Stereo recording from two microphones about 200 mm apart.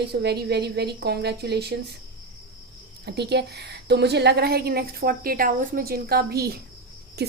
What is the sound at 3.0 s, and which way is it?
Speech, 55° right (ahead or behind).